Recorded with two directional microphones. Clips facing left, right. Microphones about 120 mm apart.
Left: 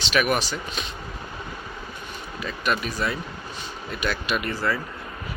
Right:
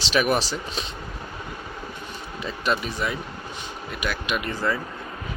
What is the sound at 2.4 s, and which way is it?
Speech, 25° right (ahead or behind).